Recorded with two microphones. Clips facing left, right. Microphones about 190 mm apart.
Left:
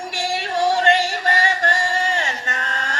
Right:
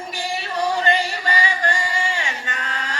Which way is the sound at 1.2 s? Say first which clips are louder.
Left 2 dB; 45° left (ahead or behind).